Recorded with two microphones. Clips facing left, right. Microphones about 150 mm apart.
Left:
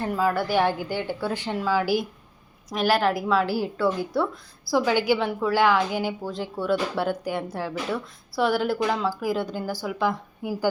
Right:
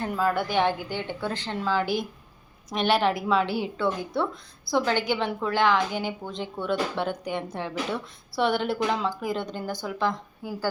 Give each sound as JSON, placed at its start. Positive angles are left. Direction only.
{"t": 0.0, "sound": "a woman's voice", "side_deg": 5}
{"t": 10.4, "sound": "a woman's voice", "side_deg": 20}